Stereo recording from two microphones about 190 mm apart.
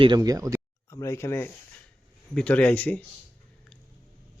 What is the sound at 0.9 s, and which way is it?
Speech, 15° left (ahead or behind).